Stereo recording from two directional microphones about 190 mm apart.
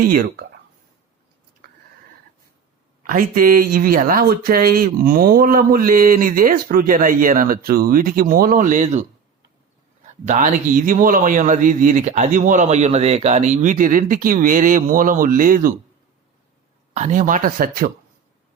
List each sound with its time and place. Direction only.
0.0 s speech: 50° right (ahead or behind)
3.0 s speech: 45° right (ahead or behind)
10.2 s speech: 40° right (ahead or behind)
16.9 s speech: 40° right (ahead or behind)